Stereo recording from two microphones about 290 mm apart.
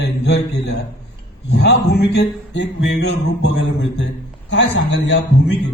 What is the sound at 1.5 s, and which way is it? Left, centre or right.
A man's voice, left.